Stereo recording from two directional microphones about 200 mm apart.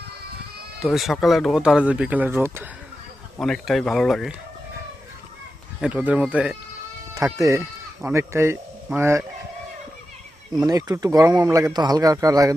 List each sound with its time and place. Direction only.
0.8 s speech: centre (ahead or behind)
3.3 s speech: centre (ahead or behind)
5.8 s speech: 10° right (ahead or behind)
7.3 s speech: 15° right (ahead or behind)
10.6 s speech: 20° right (ahead or behind)